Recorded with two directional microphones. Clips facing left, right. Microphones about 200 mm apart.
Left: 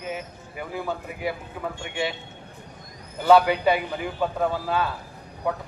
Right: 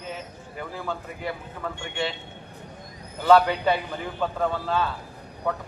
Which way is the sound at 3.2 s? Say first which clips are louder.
Left 1 dB; 10° left (ahead or behind).